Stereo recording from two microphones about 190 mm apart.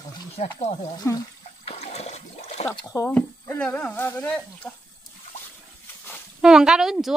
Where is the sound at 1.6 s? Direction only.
35° left (ahead or behind).